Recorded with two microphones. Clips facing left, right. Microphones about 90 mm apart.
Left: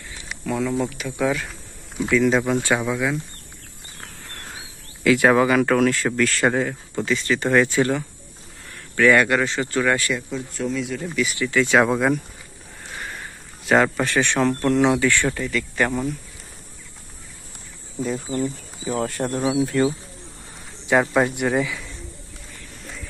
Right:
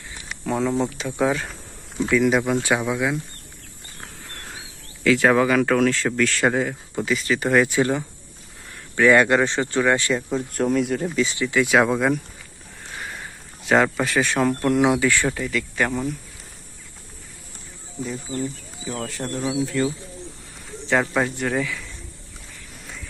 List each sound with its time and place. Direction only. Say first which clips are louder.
0.4 s speech: right 1 dB; 25° right (ahead or behind)
2.0 s speech: even; 15° right (ahead or behind)
5.0 s speech: left 1 dB; 10° left (ahead or behind); by 10.2 s 25° right (ahead or behind)
10.5 s speech: right 5 dB; 50° right (ahead or behind)
11.0 s speech: right 1 dB; 25° right (ahead or behind)
11.7 s speech: left 1 dB; centre (ahead or behind)
13.0 s boat: even; centre (ahead or behind)
13.7 s speech: left 1 dB; centre (ahead or behind)
15.4 s speech: left 1 dB; centre (ahead or behind)
19.0 s speech: left 3 dB; 50° left (ahead or behind)
20.8 s speech: left 3 dB; 15° left (ahead or behind)